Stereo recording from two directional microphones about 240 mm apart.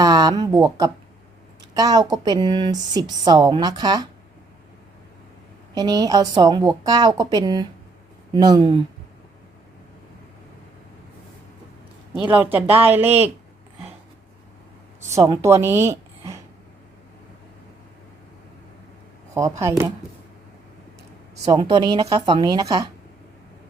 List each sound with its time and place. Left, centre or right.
0.0 s speech: centre
5.7 s speech: centre
12.3 s speech: centre
15.2 s a woman's voice: centre
19.3 s speech: centre
21.4 s speech: centre